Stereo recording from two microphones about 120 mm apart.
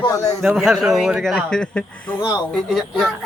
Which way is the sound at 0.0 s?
30° left (ahead or behind).